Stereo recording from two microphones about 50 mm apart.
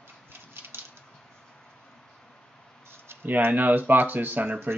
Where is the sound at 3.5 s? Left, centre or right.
Right.